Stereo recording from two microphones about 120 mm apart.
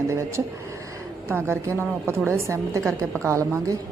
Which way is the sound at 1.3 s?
20° right (ahead or behind).